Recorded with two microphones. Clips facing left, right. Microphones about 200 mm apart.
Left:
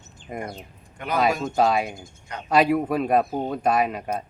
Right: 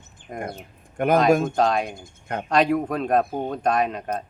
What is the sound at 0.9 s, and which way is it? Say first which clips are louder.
Speech: right 6 dB; 50° right (ahead or behind).